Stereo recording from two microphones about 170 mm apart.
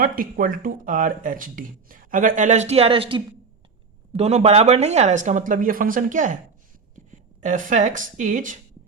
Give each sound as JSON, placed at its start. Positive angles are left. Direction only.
{"t": 0.0, "sound": "speech", "side_deg": -55}